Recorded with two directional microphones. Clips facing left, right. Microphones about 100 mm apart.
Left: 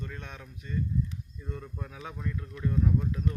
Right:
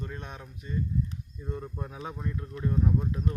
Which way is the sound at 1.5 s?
25° right (ahead or behind).